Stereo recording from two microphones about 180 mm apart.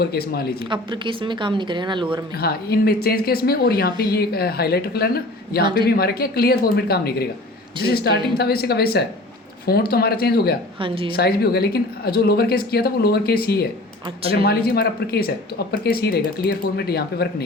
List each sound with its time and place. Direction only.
0.0 s speech: 60° left (ahead or behind)
0.7 s speech: 25° right (ahead or behind)
2.4 s speech: 60° left (ahead or behind)
10.8 s speech: 30° right (ahead or behind)
11.1 s speech: 60° left (ahead or behind)